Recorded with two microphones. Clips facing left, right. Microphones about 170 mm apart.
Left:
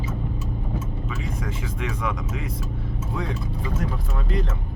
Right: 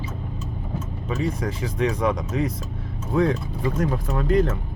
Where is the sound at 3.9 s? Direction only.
45° right (ahead or behind).